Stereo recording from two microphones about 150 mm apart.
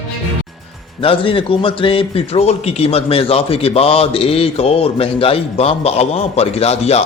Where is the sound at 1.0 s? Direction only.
35° left (ahead or behind).